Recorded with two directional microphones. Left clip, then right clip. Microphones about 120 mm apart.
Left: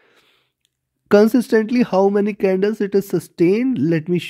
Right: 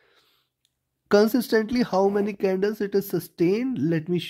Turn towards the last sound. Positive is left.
turn(degrees=45)  # may be behind; listen again after turning